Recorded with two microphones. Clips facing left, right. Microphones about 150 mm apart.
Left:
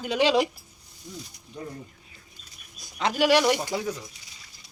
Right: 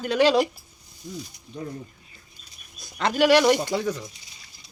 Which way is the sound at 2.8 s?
10° left (ahead or behind).